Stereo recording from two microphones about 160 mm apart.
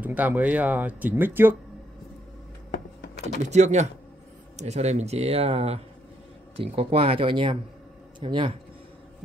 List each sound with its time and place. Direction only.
0.0 s speech: 10° right (ahead or behind)
2.7 s power windows: 90° left
3.4 s speech: 45° right (ahead or behind)